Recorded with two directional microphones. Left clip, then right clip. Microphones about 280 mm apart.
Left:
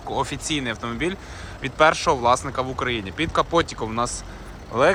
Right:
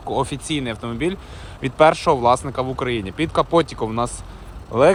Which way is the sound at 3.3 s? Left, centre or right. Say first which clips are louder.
Right 3 dB; centre.